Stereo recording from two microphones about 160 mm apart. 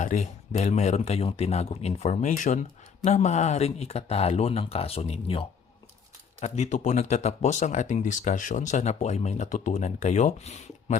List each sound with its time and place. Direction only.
0.0 s speech: 50° left (ahead or behind)